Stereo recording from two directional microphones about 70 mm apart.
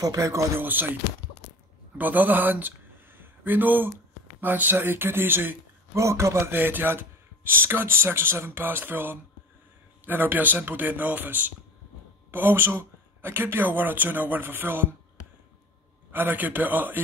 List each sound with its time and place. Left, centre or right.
0.0 s speech: right
0.6 s speech: right
2.0 s speech: right
5.9 s speech: right
16.1 s speech: right